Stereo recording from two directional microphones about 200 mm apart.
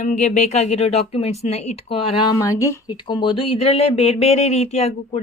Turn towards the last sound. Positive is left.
turn(degrees=30)  # may be behind; listen again after turning